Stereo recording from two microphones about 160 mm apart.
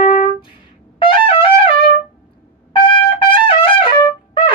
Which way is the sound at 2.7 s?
35° left (ahead or behind).